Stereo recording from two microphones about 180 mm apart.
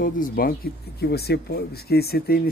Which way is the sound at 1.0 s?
65° left (ahead or behind).